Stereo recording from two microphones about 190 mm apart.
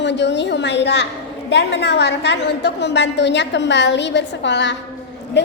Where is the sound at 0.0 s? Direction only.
65° left (ahead or behind).